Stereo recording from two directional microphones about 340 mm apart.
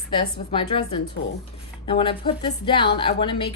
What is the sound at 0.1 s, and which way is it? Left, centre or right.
Speech, centre.